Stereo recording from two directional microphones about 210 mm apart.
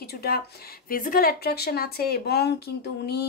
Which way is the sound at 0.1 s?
45° left (ahead or behind).